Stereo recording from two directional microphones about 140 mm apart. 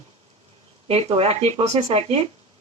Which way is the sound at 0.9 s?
50° right (ahead or behind).